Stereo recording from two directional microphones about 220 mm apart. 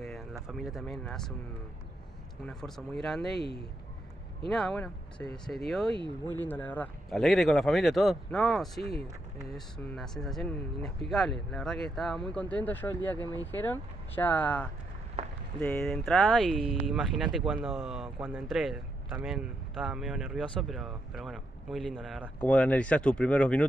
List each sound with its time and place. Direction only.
0.0 s speech: centre (ahead or behind)
2.4 s speech: 5° left (ahead or behind)
4.5 s speech: 5° left (ahead or behind)
5.9 s speech: 20° right (ahead or behind)
6.4 s speech: 10° left (ahead or behind)
9.9 s speech: centre (ahead or behind)
15.2 s a sound: 30° right (ahead or behind)
15.6 s speech: 5° left (ahead or behind)